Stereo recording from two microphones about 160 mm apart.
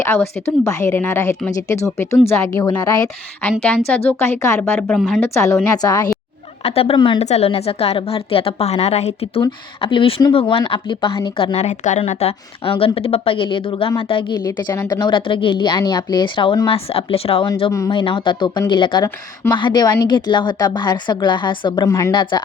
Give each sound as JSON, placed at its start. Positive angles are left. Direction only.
{"t": 0.0, "sound": "a woman's voice", "side_deg": 15}
{"t": 3.8, "sound": "speech", "side_deg": 5}
{"t": 4.2, "sound": "a woman's voice", "side_deg": 15}
{"t": 4.9, "sound": "speech", "side_deg": 0}
{"t": 5.2, "sound": "a woman's voice", "side_deg": 15}
{"t": 6.7, "sound": "speech", "side_deg": 35}
{"t": 15.0, "sound": "speech", "side_deg": 30}
{"t": 17.7, "sound": "a woman's voice", "side_deg": 25}